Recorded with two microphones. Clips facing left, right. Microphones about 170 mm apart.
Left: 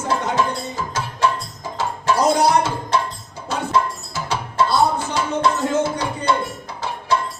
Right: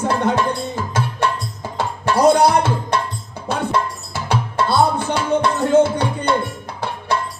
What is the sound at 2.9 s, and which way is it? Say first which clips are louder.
Tabla: left 2 dB; 60° right (ahead or behind).